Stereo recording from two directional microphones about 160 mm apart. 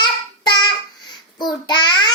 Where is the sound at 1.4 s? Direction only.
25° left (ahead or behind).